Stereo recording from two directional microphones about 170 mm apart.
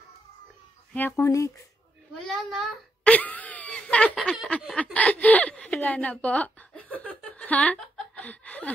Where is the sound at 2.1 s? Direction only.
Centre (ahead or behind).